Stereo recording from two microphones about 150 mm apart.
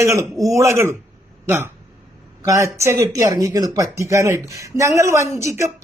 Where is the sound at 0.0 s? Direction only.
20° right (ahead or behind).